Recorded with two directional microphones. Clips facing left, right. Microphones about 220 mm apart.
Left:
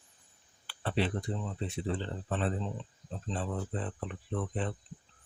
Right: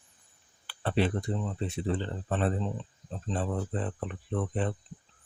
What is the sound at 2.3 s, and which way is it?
Speech, 45° right (ahead or behind).